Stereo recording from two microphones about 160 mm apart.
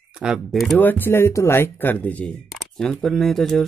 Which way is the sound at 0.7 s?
10° left (ahead or behind).